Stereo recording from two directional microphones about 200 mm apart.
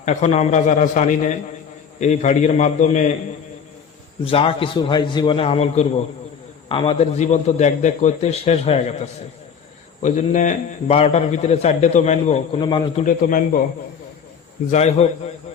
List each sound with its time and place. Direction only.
0.0 s a man's voice: 35° left (ahead or behind)
4.3 s a man's voice: 25° left (ahead or behind)
12.5 s a man's voice: 25° left (ahead or behind)
13.1 s a man's voice: 40° left (ahead or behind)
14.7 s a man's voice: 35° left (ahead or behind)